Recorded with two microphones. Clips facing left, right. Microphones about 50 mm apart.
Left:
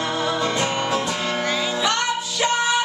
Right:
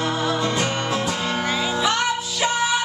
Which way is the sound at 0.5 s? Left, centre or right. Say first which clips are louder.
Left 1 dB; centre.